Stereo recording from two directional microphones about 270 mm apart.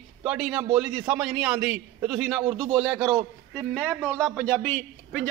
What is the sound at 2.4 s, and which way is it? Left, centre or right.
Speech, centre.